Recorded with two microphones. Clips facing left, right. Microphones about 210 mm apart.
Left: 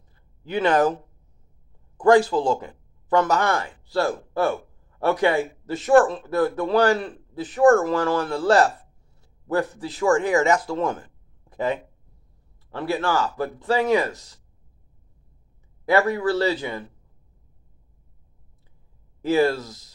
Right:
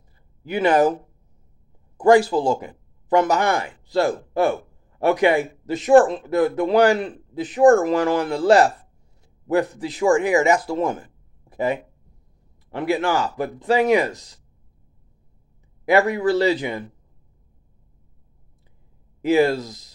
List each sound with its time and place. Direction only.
0.4 s speech: 10° right (ahead or behind)
15.8 s speech: 15° right (ahead or behind)
19.2 s speech: 15° right (ahead or behind)